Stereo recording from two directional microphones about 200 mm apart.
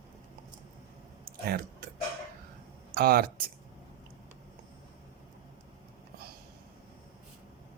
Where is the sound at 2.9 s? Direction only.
50° right (ahead or behind).